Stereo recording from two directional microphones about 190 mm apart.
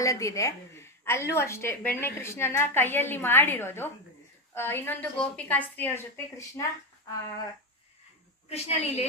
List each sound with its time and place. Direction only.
0.0 s a woman's voice: 15° left (ahead or behind)
8.5 s a woman's voice: 35° left (ahead or behind)